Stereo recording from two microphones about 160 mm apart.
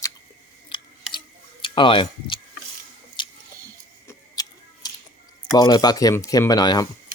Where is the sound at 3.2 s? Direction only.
30° left (ahead or behind).